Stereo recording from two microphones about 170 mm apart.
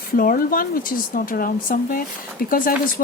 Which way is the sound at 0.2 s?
55° left (ahead or behind).